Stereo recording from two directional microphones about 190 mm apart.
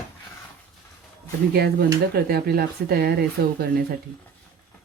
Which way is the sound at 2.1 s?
55° right (ahead or behind).